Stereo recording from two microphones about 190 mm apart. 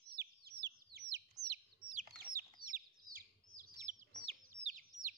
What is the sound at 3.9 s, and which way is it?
Bird, 40° right (ahead or behind).